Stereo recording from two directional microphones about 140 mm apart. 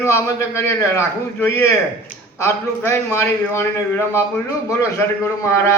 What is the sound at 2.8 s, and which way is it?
A man's voice, 15° left (ahead or behind).